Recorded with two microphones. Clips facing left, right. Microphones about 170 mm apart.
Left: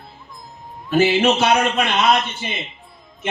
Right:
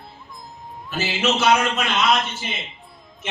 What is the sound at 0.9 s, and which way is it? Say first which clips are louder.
A man's voice: left 8 dB; 60° left (ahead or behind).